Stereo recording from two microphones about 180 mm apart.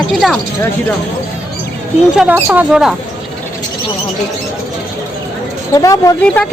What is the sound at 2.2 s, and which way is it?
Speech, 10° right (ahead or behind).